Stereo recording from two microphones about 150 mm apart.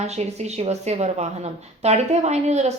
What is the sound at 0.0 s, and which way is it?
Speech, 45° right (ahead or behind).